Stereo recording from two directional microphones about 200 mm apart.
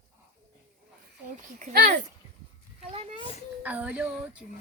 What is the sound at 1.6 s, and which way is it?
Speech, 45° right (ahead or behind).